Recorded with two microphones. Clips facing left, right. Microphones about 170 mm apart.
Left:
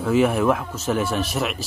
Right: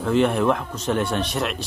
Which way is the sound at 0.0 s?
5° left (ahead or behind).